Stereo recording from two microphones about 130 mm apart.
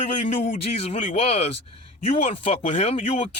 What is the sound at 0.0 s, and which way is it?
Speech, 65° left (ahead or behind).